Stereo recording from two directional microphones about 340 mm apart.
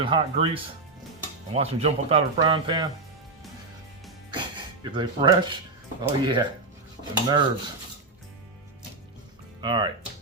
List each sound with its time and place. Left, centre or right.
0.0 s speech: centre
4.8 s speech: centre
9.6 s speech: centre